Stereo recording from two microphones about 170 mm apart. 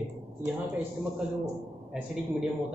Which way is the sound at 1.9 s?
5° right (ahead or behind).